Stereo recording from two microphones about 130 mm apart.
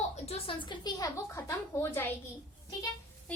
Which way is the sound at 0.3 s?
40° left (ahead or behind).